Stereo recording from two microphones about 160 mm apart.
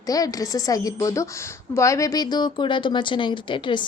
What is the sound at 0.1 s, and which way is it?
Speech, 20° left (ahead or behind).